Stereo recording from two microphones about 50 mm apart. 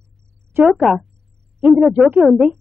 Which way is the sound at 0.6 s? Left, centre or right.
Centre.